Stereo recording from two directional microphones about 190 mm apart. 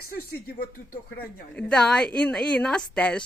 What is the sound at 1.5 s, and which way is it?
Speech, 5° left (ahead or behind).